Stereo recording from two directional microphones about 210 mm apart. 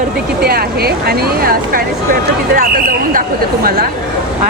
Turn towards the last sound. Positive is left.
turn(degrees=-45)  # may be behind; listen again after turning